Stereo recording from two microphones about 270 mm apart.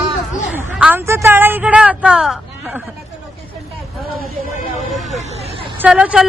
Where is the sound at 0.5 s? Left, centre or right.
Centre.